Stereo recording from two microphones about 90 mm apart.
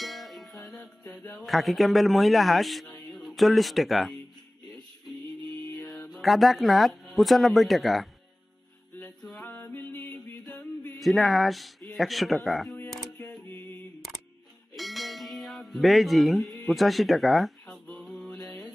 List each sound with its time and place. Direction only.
0.0 s music: centre (ahead or behind)
0.7 s music: 10° left (ahead or behind)
1.5 s speech: centre (ahead or behind)
5.9 s speech: 5° left (ahead or behind)
9.2 s music: 10° left (ahead or behind)
9.8 s music: 20° left (ahead or behind)
11.0 s speech: centre (ahead or behind)
13.5 s a sound: 20° left (ahead or behind)
14.8 s a sound: centre (ahead or behind)
17.8 s mantra: 5° left (ahead or behind)